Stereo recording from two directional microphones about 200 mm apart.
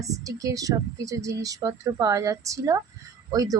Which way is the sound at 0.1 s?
15° right (ahead or behind).